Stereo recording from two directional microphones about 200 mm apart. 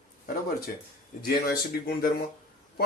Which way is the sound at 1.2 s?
50° left (ahead or behind).